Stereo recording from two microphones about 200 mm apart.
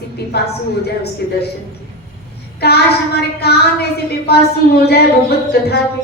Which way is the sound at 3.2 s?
55° left (ahead or behind).